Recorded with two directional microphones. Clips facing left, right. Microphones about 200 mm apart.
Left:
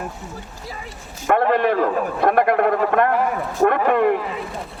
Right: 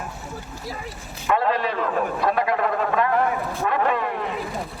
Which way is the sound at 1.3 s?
55° left (ahead or behind).